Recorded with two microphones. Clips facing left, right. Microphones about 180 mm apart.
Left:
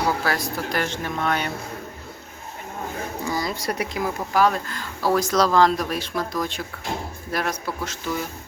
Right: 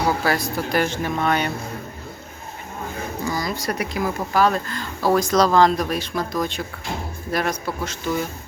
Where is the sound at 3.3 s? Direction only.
25° left (ahead or behind); by 6.2 s centre (ahead or behind).